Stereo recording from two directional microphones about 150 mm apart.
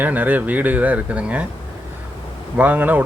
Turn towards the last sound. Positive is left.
turn(degrees=-10)  # may be behind; listen again after turning